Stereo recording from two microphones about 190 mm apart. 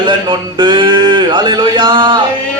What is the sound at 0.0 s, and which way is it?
A man's voice, 25° right (ahead or behind).